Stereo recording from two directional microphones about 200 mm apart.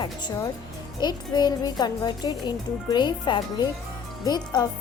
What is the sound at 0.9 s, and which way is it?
A child's voice, 20° left (ahead or behind).